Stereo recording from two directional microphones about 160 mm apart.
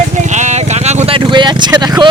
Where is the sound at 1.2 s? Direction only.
30° right (ahead or behind).